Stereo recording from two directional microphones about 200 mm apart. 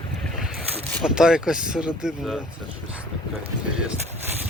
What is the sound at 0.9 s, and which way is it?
Speech, centre (ahead or behind).